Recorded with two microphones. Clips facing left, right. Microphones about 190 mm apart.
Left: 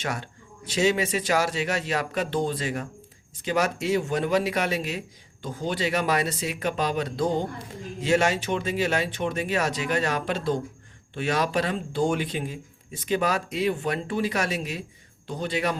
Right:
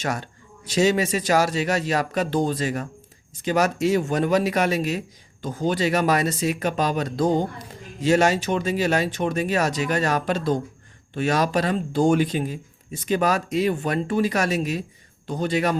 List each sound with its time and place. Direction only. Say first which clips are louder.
0.0 s speech: right 4 dB; 40° right (ahead or behind)